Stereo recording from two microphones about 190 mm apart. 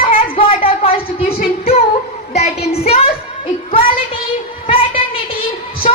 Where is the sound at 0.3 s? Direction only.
30° left (ahead or behind).